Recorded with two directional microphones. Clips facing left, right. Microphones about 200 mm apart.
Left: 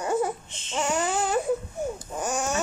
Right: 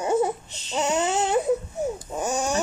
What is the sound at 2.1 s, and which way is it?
Babbling, 20° right (ahead or behind).